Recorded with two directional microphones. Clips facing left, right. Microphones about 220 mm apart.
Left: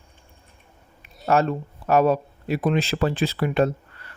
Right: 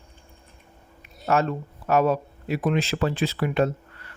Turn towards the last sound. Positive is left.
turn(degrees=35)  # may be behind; listen again after turning